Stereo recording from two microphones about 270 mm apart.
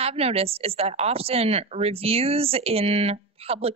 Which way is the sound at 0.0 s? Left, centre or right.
Right.